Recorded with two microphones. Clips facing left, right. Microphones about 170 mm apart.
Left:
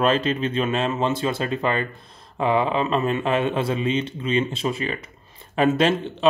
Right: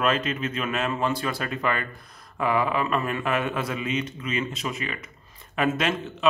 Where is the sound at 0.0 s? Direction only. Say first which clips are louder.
Left 4 dB; 30° left (ahead or behind).